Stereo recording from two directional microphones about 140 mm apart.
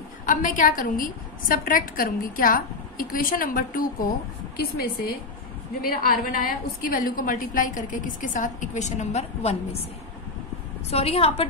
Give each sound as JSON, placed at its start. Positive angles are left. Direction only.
{"t": 0.3, "sound": "a woman's voice", "side_deg": 70}
{"t": 10.9, "sound": "a woman's voice", "side_deg": 45}